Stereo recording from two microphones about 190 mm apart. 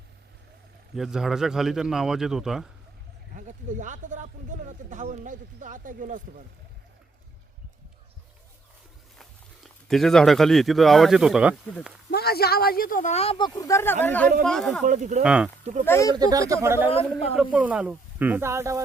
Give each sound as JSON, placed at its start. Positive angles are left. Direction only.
{"t": 0.9, "sound": "a man's voice", "side_deg": 0}
{"t": 3.3, "sound": "speech", "side_deg": -40}
{"t": 9.9, "sound": "a man's voice", "side_deg": 0}
{"t": 12.1, "sound": "speech", "side_deg": 55}
{"t": 13.6, "sound": "a man's voice", "side_deg": 15}
{"t": 14.8, "sound": "speech", "side_deg": -40}
{"t": 15.2, "sound": "a man's voice", "side_deg": -5}
{"t": 15.9, "sound": "speech", "side_deg": 15}
{"t": 16.1, "sound": "speech", "side_deg": -20}
{"t": 16.9, "sound": "a man's voice", "side_deg": 30}
{"t": 17.3, "sound": "speech", "side_deg": -5}